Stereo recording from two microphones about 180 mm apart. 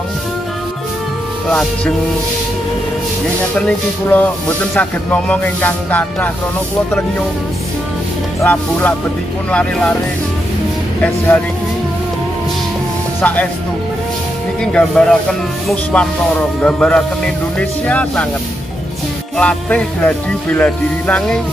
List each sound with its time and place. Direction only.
3.5 s music: 5° left (ahead or behind)
8.4 s music: 10° left (ahead or behind)
11.0 s music: 10° left (ahead or behind)
13.2 s music: 10° left (ahead or behind)
14.6 s speech: 5° left (ahead or behind)
15.7 s music: 5° left (ahead or behind)
19.3 s music: 5° left (ahead or behind)